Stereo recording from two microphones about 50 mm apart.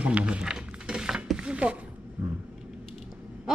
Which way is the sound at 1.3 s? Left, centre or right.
Right.